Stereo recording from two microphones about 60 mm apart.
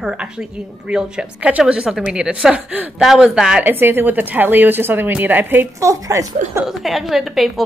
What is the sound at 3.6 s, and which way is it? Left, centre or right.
A woman's voice, right.